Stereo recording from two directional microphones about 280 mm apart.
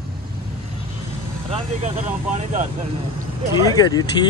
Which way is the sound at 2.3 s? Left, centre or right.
Right.